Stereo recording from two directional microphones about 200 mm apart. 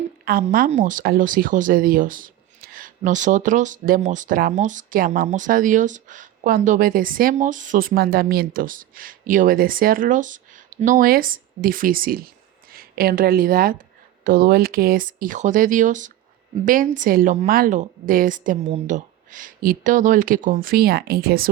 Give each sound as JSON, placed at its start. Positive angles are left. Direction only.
{"t": 0.3, "sound": "speech", "side_deg": -45}